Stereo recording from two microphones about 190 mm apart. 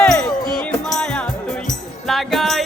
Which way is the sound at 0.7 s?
5° left (ahead or behind).